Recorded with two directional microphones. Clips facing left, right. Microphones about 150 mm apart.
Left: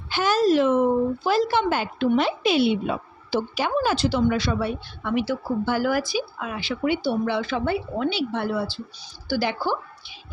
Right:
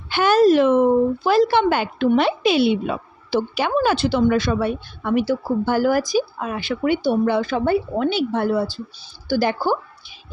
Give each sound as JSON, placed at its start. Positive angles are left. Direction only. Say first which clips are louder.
{"t": 0.1, "sound": "speech", "louder": "right 5 dB", "side_deg": -60}
{"t": 3.2, "sound": "a woman's voice", "louder": "right 4 dB", "side_deg": -70}